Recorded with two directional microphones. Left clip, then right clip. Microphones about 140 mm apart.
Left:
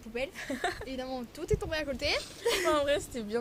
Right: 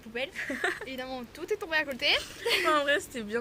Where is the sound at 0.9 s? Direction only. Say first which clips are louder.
Even; 30° left (ahead or behind).